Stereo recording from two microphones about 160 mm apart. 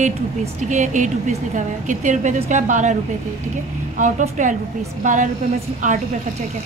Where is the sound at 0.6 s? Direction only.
50° right (ahead or behind).